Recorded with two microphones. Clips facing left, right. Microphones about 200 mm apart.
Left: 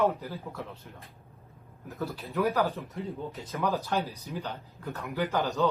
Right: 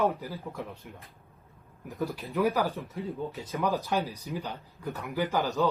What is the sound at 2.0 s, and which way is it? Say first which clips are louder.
Speech: right 1 dB; 15° right (ahead or behind).